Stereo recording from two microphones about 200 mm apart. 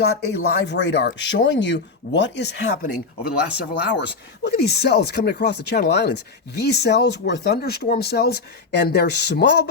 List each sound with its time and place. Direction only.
0.0 s speech: 55° left (ahead or behind)